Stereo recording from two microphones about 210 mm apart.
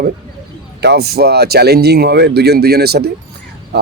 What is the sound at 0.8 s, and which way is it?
A man's voice, 50° right (ahead or behind).